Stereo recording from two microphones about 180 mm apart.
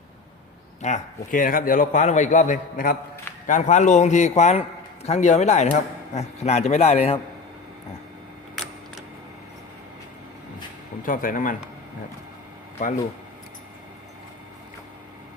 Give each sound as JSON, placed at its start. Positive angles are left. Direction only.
{"t": 0.8, "sound": "a man's voice", "side_deg": 40}
{"t": 11.0, "sound": "a man's voice", "side_deg": 50}